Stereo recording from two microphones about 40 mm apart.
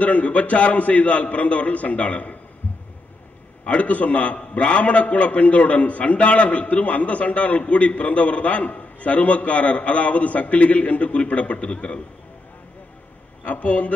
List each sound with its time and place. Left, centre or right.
0.0 s a man's voice: left
3.6 s a man's voice: left
13.4 s a man's voice: left